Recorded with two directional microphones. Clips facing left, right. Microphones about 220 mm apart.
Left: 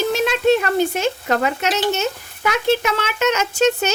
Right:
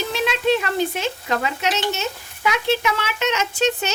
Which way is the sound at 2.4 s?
45° left (ahead or behind).